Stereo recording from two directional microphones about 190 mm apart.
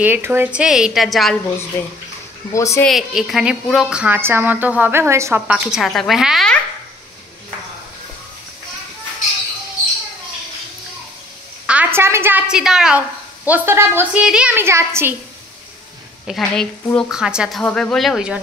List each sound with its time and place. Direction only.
0.0 s a woman's voice: 10° right (ahead or behind)
1.8 s speech: 10° left (ahead or behind)
2.9 s a woman's voice: centre (ahead or behind)
11.6 s a woman's voice: 5° right (ahead or behind)
16.3 s a woman's voice: centre (ahead or behind)